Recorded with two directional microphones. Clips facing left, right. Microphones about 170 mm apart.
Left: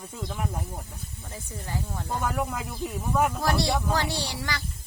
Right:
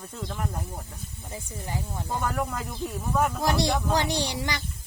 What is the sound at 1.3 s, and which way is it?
Speech, 20° right (ahead or behind).